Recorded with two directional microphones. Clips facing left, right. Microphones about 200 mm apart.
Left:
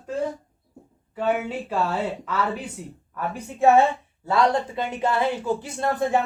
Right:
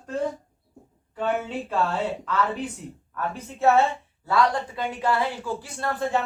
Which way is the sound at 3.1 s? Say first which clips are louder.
Left 1 dB; 10° left (ahead or behind).